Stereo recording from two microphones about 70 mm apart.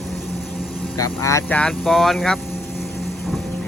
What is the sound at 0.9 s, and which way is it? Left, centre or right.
Speech, left.